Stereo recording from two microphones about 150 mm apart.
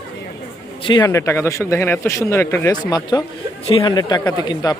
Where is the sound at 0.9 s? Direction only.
25° left (ahead or behind).